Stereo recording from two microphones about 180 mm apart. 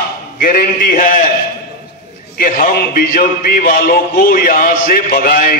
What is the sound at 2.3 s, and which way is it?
A man's voice, 55° left (ahead or behind).